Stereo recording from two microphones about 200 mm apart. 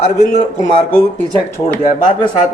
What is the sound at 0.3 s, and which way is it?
Speech, 35° left (ahead or behind).